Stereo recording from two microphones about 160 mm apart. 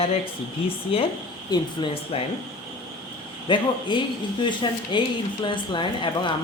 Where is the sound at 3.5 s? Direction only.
30° left (ahead or behind).